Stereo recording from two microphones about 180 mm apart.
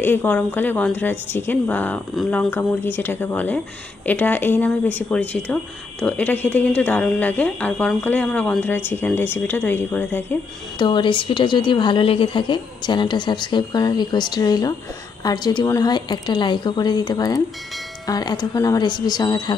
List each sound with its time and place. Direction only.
0.0 s a woman's voice: 10° left (ahead or behind)
10.8 s a woman's voice: 25° left (ahead or behind)